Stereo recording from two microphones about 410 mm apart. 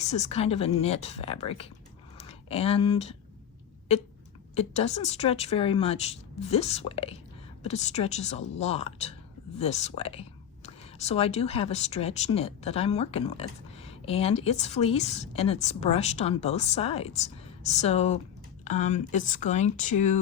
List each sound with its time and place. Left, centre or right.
0.0 s a woman's voice: centre
4.5 s a woman's voice: centre